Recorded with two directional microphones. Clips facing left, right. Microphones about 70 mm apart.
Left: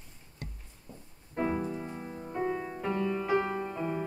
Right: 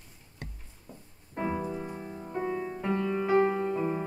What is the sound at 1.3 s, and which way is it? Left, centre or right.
Music, centre.